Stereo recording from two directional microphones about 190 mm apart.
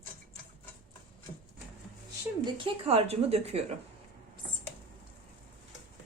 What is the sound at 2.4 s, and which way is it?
Speech, 30° right (ahead or behind).